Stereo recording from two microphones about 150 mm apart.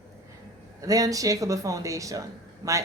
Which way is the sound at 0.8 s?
25° right (ahead or behind).